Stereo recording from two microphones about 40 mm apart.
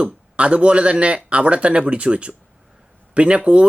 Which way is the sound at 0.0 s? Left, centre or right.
Right.